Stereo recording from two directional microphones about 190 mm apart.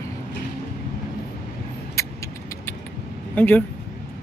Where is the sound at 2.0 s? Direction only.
15° left (ahead or behind).